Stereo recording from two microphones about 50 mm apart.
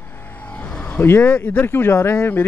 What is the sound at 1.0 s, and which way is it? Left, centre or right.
Speech, left.